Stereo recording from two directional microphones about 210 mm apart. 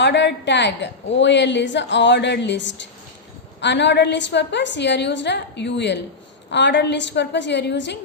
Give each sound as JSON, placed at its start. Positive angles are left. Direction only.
{"t": 0.0, "sound": "a woman's voice", "side_deg": 55}